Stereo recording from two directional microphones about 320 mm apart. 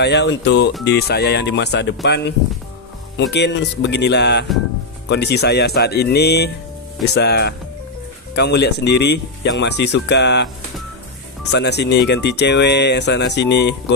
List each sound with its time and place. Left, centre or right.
0.0 s speech: left
3.2 s speech: left
11.5 s speech: left